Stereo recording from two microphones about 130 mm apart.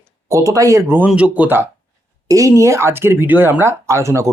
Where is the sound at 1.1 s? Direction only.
10° right (ahead or behind).